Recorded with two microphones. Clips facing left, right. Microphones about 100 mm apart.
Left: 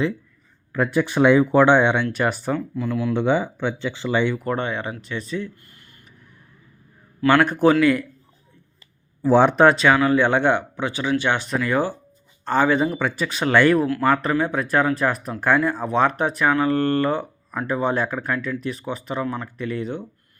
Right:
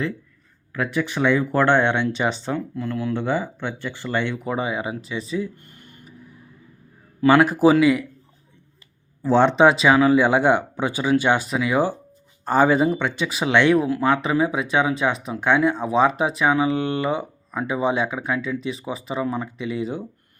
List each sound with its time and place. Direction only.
0.7 s speech: centre (ahead or behind)
1.2 s speech: 20° left (ahead or behind)
3.1 s speech: 20° left (ahead or behind)
4.4 s speech: 5° right (ahead or behind)
7.3 s speech: 5° right (ahead or behind)
9.2 s speech: 10° left (ahead or behind)
9.6 s speech: centre (ahead or behind)
12.9 s speech: 5° left (ahead or behind)
13.8 s speech: 20° right (ahead or behind)
14.1 s speech: centre (ahead or behind)